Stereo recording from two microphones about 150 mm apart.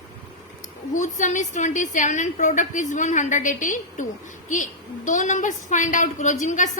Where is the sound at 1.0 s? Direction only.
55° left (ahead or behind).